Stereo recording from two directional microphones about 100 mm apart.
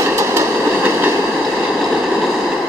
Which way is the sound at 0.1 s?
30° right (ahead or behind).